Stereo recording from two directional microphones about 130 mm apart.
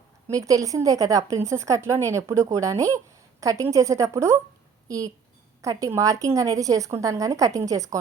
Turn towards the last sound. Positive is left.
turn(degrees=-25)  # may be behind; listen again after turning